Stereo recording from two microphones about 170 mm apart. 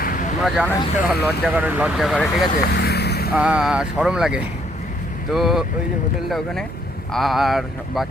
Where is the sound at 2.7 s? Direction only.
75° left (ahead or behind).